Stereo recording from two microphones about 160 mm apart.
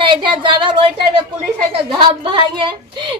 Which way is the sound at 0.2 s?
30° right (ahead or behind).